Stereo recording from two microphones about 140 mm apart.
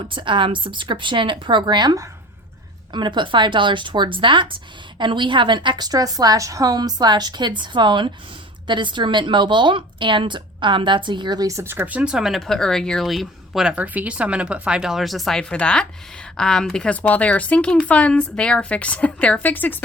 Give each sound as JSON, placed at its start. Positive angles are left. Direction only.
{"t": 0.1, "sound": "a woman's voice", "side_deg": -35}